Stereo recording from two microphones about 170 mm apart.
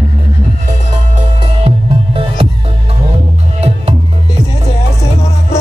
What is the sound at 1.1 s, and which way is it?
Music, 35° right (ahead or behind).